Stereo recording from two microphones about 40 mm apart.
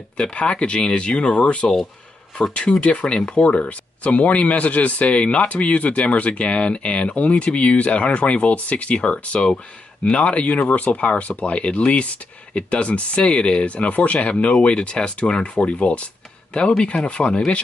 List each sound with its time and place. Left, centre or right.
0.3 s speech: left
2.8 s speech: left